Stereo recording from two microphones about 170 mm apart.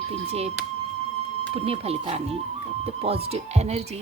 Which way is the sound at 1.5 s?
35° right (ahead or behind).